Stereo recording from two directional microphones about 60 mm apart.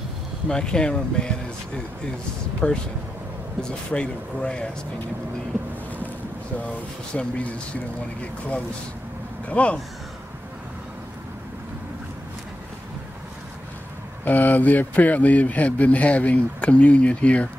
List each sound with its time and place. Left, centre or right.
0.5 s speech: centre
2.6 s speech: centre
7.2 s speech: centre
14.2 s speech: left